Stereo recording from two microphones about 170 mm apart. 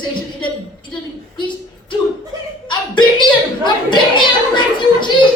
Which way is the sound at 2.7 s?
25° left (ahead or behind).